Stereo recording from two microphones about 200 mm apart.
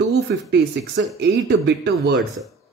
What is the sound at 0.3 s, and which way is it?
Speech, 60° right (ahead or behind).